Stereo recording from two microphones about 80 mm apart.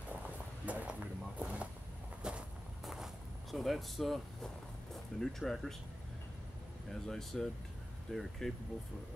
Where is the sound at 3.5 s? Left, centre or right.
Centre.